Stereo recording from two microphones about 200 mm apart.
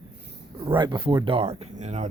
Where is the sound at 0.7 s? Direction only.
25° right (ahead or behind).